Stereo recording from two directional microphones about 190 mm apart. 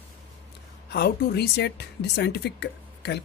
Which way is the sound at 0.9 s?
55° left (ahead or behind).